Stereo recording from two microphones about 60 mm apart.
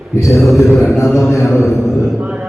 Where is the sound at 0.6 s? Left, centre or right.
Centre.